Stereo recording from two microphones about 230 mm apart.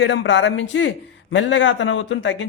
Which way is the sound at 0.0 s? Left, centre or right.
Left.